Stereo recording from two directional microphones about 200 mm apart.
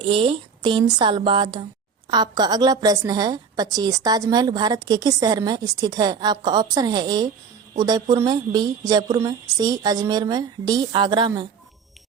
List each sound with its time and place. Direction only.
0.0 s a woman's voice: 25° right (ahead or behind)